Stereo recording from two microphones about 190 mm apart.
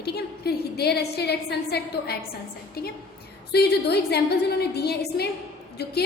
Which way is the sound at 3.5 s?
60° left (ahead or behind).